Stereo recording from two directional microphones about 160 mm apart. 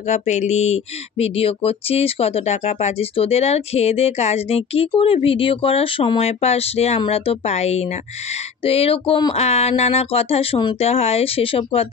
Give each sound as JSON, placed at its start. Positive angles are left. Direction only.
{"t": 0.0, "sound": "speech", "side_deg": 45}